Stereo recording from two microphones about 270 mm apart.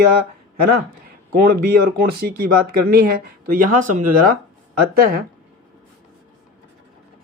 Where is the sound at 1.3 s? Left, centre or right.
Right.